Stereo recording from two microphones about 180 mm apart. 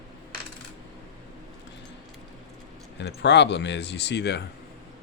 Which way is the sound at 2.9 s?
75° left (ahead or behind).